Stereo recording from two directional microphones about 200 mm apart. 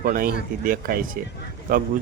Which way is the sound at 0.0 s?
45° right (ahead or behind).